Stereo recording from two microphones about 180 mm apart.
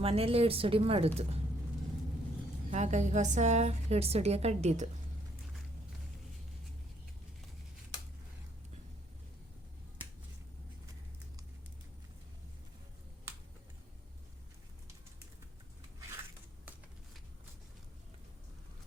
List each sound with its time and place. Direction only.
0.0 s a woman's voice: 35° right (ahead or behind)
2.6 s a woman's voice: 40° right (ahead or behind)